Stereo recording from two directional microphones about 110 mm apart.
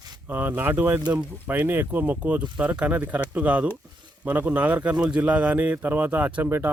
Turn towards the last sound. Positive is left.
turn(degrees=-20)  # may be behind; listen again after turning